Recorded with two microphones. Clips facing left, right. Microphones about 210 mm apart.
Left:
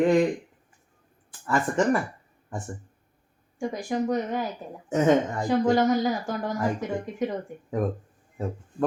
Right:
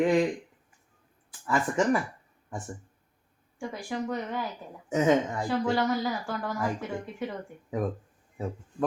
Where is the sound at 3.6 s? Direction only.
40° left (ahead or behind).